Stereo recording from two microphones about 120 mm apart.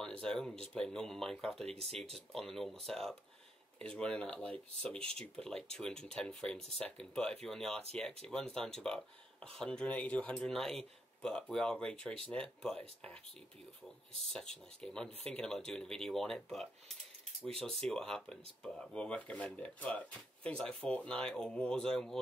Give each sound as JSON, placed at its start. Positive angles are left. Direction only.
{"t": 0.0, "sound": "speech", "side_deg": 5}
{"t": 1.7, "sound": "speech", "side_deg": -55}
{"t": 2.1, "sound": "speech", "side_deg": 0}
{"t": 14.2, "sound": "speech", "side_deg": 5}
{"t": 17.8, "sound": "speech", "side_deg": 5}